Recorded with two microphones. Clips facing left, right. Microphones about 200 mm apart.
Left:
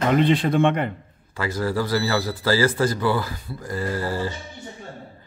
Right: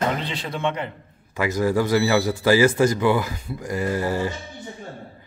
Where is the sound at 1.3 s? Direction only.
20° right (ahead or behind).